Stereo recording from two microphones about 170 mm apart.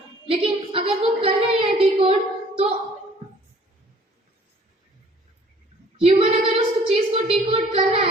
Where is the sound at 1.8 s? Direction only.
35° right (ahead or behind).